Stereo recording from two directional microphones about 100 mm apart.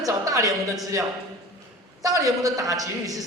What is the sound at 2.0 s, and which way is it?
A man's voice, 35° right (ahead or behind).